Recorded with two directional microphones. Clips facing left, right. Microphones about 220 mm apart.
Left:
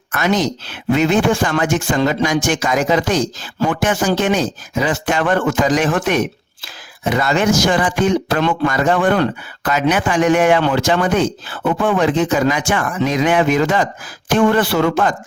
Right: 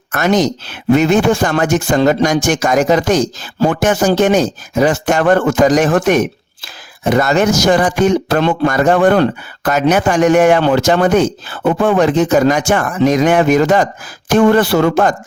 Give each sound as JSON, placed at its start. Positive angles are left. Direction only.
{"t": 0.1, "sound": "a man's voice", "side_deg": -45}